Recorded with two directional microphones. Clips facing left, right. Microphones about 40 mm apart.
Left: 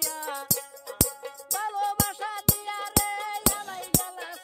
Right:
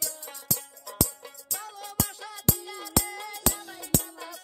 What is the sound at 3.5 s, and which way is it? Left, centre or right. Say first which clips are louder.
Music: left 1 dB; left.